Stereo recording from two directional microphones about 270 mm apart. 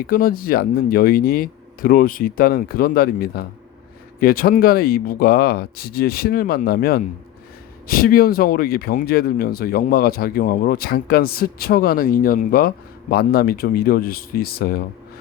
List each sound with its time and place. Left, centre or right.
0.1 s speech: left